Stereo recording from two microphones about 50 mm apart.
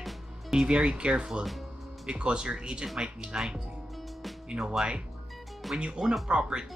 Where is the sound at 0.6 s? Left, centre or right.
Centre.